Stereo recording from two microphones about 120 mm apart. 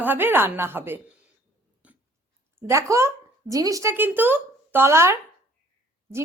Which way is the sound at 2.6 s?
25° right (ahead or behind).